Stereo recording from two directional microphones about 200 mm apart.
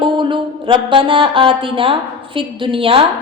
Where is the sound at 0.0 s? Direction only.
25° right (ahead or behind).